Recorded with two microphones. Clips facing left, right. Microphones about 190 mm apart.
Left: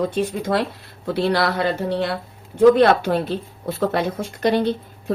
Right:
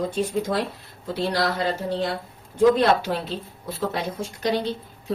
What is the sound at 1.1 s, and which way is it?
Speech, 65° left (ahead or behind).